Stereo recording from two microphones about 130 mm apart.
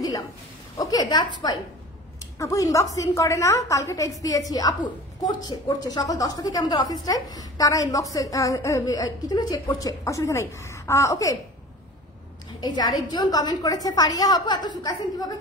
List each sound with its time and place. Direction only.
0.7 s a woman's voice: 30° left (ahead or behind)
12.5 s a woman's voice: 30° left (ahead or behind)